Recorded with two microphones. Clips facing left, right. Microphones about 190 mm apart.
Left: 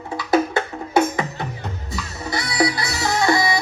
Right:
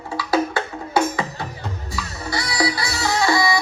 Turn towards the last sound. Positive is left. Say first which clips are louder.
# even
turn(degrees=20)  # may be behind; listen again after turning